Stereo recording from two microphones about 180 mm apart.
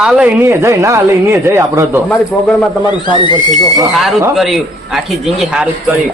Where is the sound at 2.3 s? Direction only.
5° left (ahead or behind).